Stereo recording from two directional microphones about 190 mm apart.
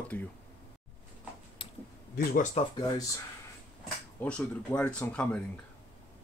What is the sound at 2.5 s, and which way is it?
Speech, 20° left (ahead or behind).